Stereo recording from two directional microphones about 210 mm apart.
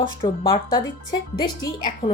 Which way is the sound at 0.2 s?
25° left (ahead or behind).